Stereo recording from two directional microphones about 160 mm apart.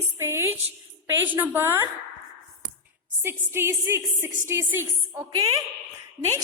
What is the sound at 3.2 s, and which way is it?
A woman's voice, 15° right (ahead or behind).